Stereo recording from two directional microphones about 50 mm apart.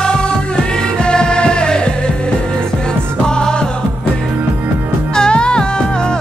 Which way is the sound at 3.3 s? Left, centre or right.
Centre.